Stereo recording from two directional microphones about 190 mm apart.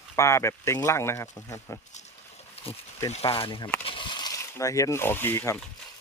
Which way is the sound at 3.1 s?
30° left (ahead or behind).